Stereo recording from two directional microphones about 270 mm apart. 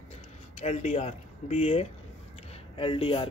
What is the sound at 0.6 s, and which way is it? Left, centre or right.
Speech, left.